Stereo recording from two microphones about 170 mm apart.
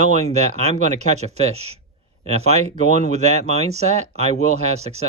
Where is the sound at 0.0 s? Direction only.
40° right (ahead or behind).